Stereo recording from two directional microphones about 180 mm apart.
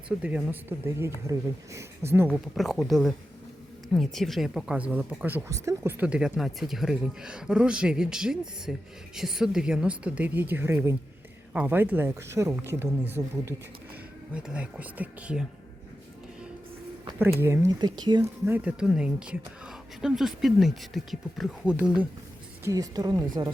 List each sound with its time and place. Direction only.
0.2 s speech: 5° right (ahead or behind)
2.6 s speech: centre (ahead or behind)
17.4 s speech: 15° right (ahead or behind)
18.4 s speech: 10° right (ahead or behind)
22.6 s speech: 20° right (ahead or behind)